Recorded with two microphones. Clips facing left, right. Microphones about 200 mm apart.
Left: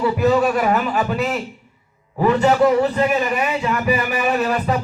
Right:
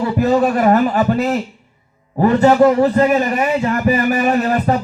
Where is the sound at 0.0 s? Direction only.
45° right (ahead or behind).